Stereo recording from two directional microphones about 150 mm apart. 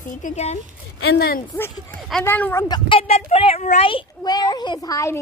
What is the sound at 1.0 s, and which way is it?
Speech, 90° left.